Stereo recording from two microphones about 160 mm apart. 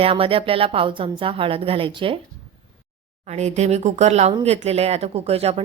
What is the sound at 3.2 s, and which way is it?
A woman's voice, 45° right (ahead or behind).